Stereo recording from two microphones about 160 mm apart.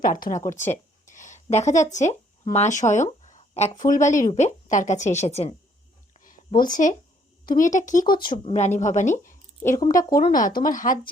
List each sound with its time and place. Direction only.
0.0 s speech: 55° left (ahead or behind)
0.3 s speech: 20° left (ahead or behind)
1.0 s speech: 50° left (ahead or behind)
2.9 s a sound: 50° left (ahead or behind)
3.8 s a woman's voice: 55° left (ahead or behind)
6.2 s a sound: 60° left (ahead or behind)
7.4 s speech: 55° left (ahead or behind)
8.4 s a woman's voice: 45° left (ahead or behind)
9.8 s speech: 20° left (ahead or behind)
10.3 s speech: 60° left (ahead or behind)